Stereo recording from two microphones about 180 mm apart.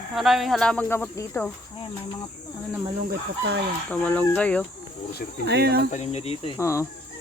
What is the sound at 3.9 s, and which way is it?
Speech, 5° left (ahead or behind).